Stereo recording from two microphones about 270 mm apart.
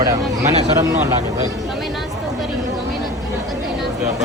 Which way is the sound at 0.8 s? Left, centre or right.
Centre.